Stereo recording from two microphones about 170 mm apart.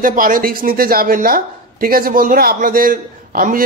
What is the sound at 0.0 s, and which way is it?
Speech, 55° right (ahead or behind).